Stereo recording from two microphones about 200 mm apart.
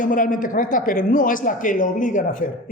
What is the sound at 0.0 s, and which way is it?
A man's voice, 40° left (ahead or behind).